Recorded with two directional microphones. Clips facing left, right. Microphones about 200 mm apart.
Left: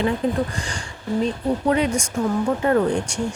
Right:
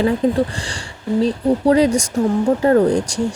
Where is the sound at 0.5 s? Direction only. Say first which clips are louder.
Right 1 dB; 30° right (ahead or behind).